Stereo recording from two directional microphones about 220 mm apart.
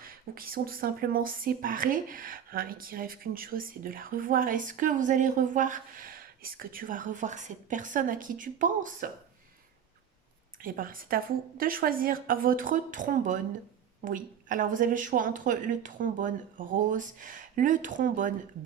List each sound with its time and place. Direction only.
0.0 s speech: 40° right (ahead or behind)
10.6 s speech: 40° right (ahead or behind)